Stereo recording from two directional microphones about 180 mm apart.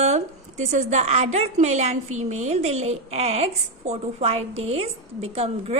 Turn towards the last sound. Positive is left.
turn(degrees=-35)  # may be behind; listen again after turning